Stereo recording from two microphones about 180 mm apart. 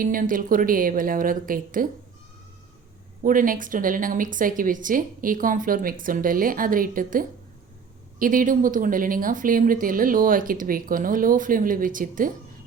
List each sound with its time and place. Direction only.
0.0 s speech: 50° right (ahead or behind)
3.2 s speech: 50° right (ahead or behind)